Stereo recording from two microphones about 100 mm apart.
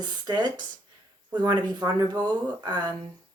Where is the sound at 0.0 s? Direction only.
45° right (ahead or behind).